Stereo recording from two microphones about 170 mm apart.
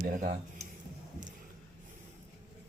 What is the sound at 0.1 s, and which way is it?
Speech, 50° right (ahead or behind).